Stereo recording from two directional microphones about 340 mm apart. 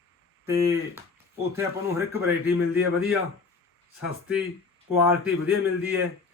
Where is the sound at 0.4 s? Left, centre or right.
Centre.